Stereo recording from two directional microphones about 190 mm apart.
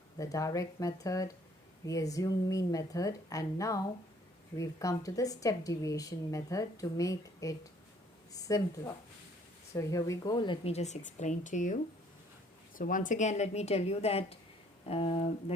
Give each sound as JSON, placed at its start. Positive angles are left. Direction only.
{"t": 0.2, "sound": "a woman's voice", "side_deg": 15}